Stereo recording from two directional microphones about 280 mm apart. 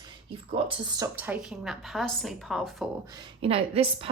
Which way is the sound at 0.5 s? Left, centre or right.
Centre.